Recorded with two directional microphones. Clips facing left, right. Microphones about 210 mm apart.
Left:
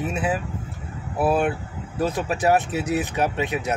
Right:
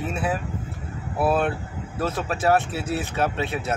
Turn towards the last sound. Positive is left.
turn(degrees=15)  # may be behind; listen again after turning